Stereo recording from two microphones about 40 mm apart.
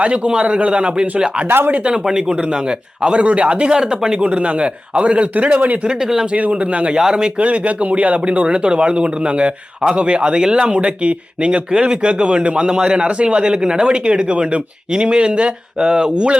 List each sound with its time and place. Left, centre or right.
0.0 s speech: right
1.5 s speech: right
1.8 s speech: right
3.7 s speech: centre
4.3 s speech: right
5.8 s speech: right
6.3 s speech: right
7.0 s speech: centre
7.3 s speech: right